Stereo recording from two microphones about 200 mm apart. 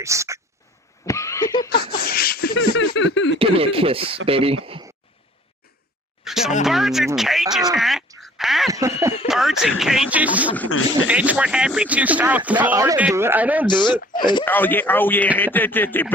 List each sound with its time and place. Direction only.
0.0 s speech: 15° right (ahead or behind)
1.0 s laughter: 15° left (ahead or behind)
2.0 s a sound: 50° left (ahead or behind)
2.6 s speech: 75° left (ahead or behind)
3.3 s speech: 30° right (ahead or behind)
6.2 s a sound: centre (ahead or behind)
6.7 s speech: centre (ahead or behind)
8.7 s speech: 15° right (ahead or behind)
9.2 s speech: centre (ahead or behind)
13.7 s speech: 20° left (ahead or behind)
14.4 s a man's voice: 10° left (ahead or behind)